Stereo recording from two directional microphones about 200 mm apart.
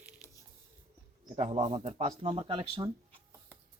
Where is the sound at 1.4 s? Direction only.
30° right (ahead or behind).